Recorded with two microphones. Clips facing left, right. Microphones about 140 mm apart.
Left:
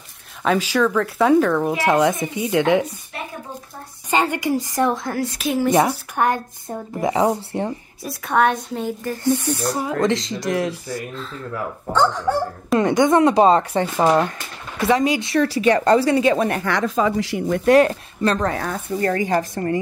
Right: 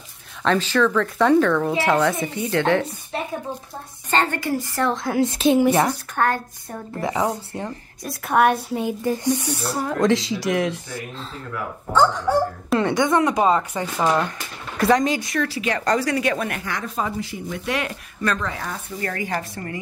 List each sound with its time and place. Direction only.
0.4 s speech: 10° left (ahead or behind)
4.1 s speech: 10° left (ahead or behind)
5.1 s speech: 20° right (ahead or behind)
5.7 s speech: 15° left (ahead or behind)
8.0 s speech: centre (ahead or behind)
9.7 s speech: centre (ahead or behind)
12.7 s a woman's voice: 20° left (ahead or behind)
14.8 s speech: 5° left (ahead or behind)
15.1 s a woman's voice: 25° left (ahead or behind)
15.4 s speech: 35° left (ahead or behind)
16.6 s speech: 85° left
17.5 s speech: 45° left (ahead or behind)
18.5 s speech: 50° left (ahead or behind)
18.9 s speech: 30° left (ahead or behind)